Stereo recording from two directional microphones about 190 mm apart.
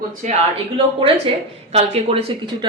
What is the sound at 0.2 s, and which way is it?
Speech, 35° right (ahead or behind).